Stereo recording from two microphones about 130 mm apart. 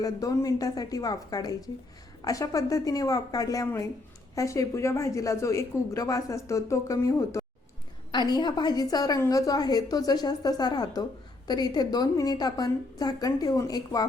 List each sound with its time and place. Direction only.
0.0 s a woman's voice: 25° left (ahead or behind)
8.1 s a woman's voice: 35° left (ahead or behind)